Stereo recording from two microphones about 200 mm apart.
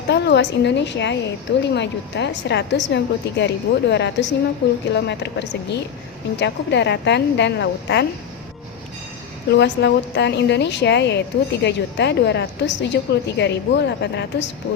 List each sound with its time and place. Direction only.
0.1 s a woman's voice: 60° left (ahead or behind)
9.5 s a woman's voice: 60° left (ahead or behind)